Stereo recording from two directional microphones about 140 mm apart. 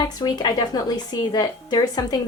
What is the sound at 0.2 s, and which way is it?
Speech, 30° left (ahead or behind).